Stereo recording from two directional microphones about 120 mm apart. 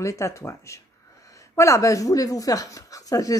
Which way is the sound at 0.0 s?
25° left (ahead or behind).